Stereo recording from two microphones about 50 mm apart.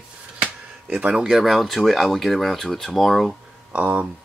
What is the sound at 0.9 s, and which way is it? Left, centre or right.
Speech, right.